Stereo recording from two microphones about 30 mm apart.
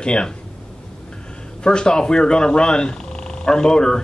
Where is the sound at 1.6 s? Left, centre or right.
Left.